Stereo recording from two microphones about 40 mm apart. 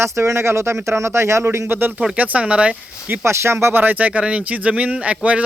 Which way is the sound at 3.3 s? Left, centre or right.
Right.